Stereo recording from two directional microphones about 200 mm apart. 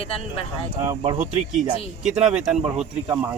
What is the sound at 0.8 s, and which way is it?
Speech, 20° right (ahead or behind).